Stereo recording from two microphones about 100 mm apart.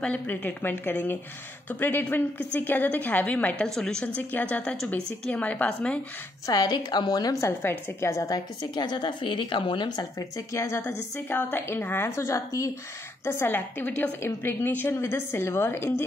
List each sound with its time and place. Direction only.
0.0 s a woman's voice: 15° left (ahead or behind)
6.4 s speech: 40° left (ahead or behind)
8.7 s a woman's voice: 50° left (ahead or behind); by 16.1 s 25° left (ahead or behind)